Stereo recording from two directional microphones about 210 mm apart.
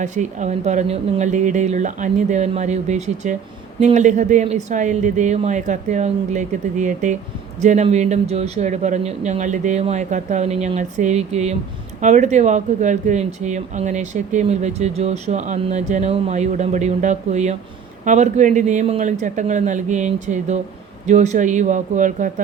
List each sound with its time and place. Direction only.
0.0 s speech: 35° right (ahead or behind)